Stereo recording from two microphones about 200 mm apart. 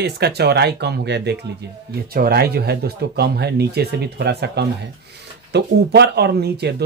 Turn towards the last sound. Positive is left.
turn(degrees=-55)  # may be behind; listen again after turning